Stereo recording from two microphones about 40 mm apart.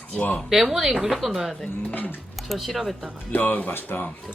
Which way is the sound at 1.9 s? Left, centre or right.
Left.